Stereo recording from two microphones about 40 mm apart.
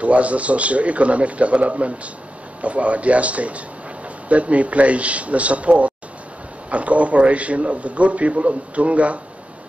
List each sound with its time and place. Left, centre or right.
0.0 s a man's voice: right